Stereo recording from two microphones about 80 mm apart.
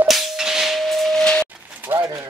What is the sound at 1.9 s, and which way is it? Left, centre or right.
Pigeon, right.